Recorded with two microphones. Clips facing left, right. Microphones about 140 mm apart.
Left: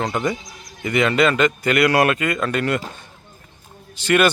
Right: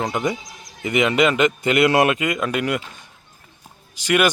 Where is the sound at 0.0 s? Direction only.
15° right (ahead or behind).